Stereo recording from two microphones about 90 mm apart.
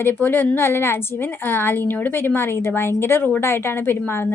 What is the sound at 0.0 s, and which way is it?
A woman's voice, 20° left (ahead or behind).